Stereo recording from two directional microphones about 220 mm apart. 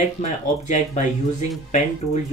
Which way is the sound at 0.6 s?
35° left (ahead or behind).